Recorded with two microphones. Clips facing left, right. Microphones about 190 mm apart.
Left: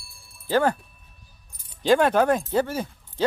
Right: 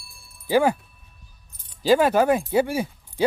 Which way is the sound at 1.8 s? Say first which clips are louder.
Right 1 dB; 5° right (ahead or behind).